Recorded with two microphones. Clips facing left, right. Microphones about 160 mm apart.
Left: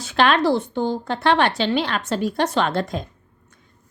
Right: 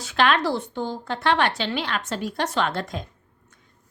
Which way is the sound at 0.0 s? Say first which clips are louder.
Left 3 dB; 30° left (ahead or behind).